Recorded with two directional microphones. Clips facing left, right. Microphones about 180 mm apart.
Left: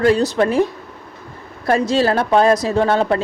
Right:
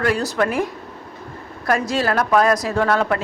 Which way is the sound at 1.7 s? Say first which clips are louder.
Left 4 dB; 30° left (ahead or behind).